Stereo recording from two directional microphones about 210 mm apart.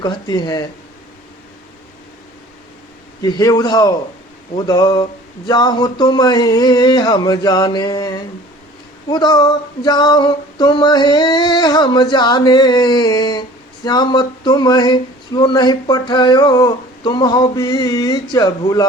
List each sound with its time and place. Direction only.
0.0 s speech: 20° left (ahead or behind)
3.2 s speech: 20° left (ahead or behind)